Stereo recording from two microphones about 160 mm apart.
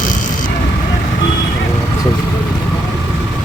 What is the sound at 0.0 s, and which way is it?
Vehicle, 55° left (ahead or behind).